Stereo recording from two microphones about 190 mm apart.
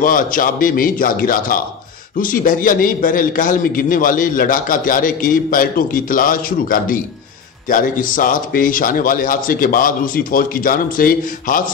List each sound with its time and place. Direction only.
0.0 s a man's voice: 45° left (ahead or behind)